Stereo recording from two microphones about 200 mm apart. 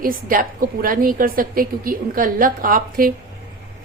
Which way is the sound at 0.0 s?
45° right (ahead or behind).